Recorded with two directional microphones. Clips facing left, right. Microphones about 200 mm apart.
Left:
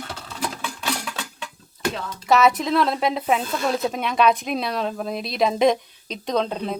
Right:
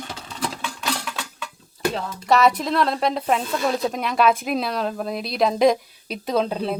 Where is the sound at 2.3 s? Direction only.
Centre (ahead or behind).